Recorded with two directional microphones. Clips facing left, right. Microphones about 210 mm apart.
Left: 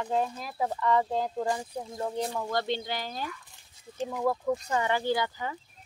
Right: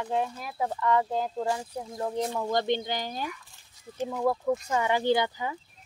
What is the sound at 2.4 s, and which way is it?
Speech, 20° right (ahead or behind).